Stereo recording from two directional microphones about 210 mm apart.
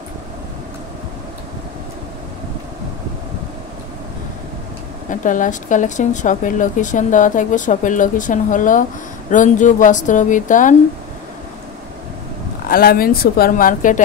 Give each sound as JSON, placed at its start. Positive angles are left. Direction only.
{"t": 5.1, "sound": "a woman's voice", "side_deg": 40}
{"t": 12.6, "sound": "a woman's voice", "side_deg": 45}